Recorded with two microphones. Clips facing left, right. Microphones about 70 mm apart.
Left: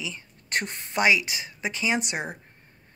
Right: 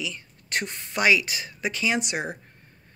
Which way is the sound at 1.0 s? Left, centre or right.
Left.